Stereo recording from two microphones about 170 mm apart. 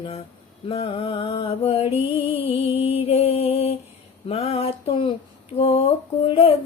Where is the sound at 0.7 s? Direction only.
35° left (ahead or behind).